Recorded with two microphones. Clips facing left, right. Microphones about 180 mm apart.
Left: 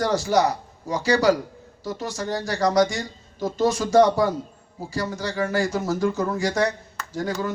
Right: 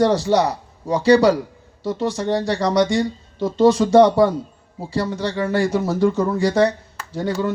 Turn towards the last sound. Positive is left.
turn(degrees=-30)  # may be behind; listen again after turning